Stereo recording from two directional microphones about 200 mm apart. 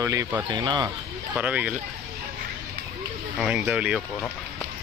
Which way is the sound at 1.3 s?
5° right (ahead or behind).